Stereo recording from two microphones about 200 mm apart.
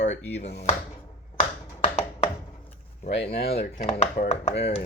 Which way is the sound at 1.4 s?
30° left (ahead or behind).